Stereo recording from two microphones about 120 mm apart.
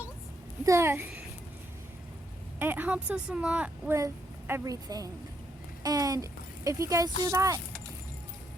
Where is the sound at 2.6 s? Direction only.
15° right (ahead or behind).